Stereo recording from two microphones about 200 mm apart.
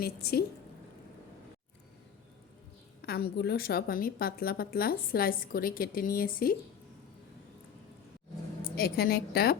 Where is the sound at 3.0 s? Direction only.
50° left (ahead or behind).